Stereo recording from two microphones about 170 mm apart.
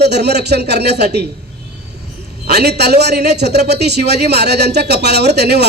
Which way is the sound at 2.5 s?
70° right (ahead or behind).